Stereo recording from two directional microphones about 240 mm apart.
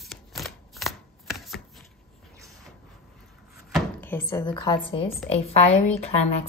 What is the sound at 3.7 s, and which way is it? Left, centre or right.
Drawer open or close, centre.